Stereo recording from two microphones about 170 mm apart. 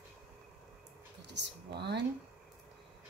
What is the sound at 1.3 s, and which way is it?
Speech, 85° right.